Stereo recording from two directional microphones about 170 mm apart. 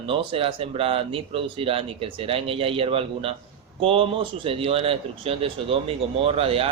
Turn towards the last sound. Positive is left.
turn(degrees=-35)  # may be behind; listen again after turning